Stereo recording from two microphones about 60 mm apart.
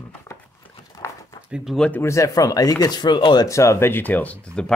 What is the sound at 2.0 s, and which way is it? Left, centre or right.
Speech, left.